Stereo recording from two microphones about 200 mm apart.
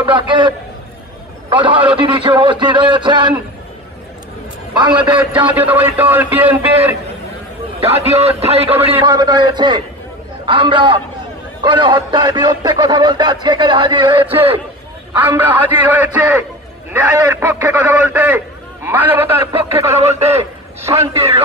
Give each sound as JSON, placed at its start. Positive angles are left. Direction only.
{"t": 0.0, "sound": "speech", "side_deg": -25}
{"t": 4.7, "sound": "speech", "side_deg": -25}
{"t": 5.7, "sound": "a man's voice", "side_deg": -10}
{"t": 7.8, "sound": "speech", "side_deg": -30}
{"t": 15.2, "sound": "a man's voice", "side_deg": -10}
{"t": 20.0, "sound": "a man's voice", "side_deg": -30}